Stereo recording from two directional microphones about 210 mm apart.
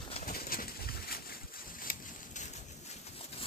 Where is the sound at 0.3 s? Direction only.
45° left (ahead or behind).